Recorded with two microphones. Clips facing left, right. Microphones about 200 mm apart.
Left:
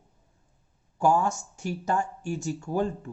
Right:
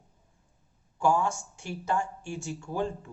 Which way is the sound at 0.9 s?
40° left (ahead or behind).